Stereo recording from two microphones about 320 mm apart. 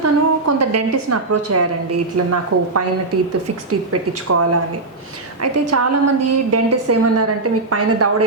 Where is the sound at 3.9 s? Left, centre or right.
Right.